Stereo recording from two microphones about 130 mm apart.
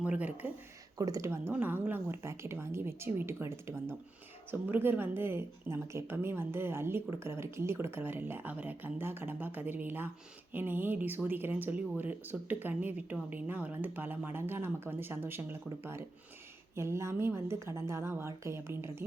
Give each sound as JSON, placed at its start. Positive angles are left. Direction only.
{"t": 0.0, "sound": "speech", "side_deg": -10}
{"t": 0.9, "sound": "speech", "side_deg": -25}